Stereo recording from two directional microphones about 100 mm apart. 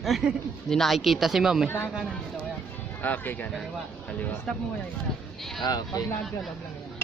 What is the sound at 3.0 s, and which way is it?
Speech, 20° left (ahead or behind).